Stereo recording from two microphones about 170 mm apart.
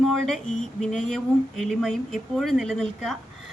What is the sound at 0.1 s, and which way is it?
Speech, 5° left (ahead or behind).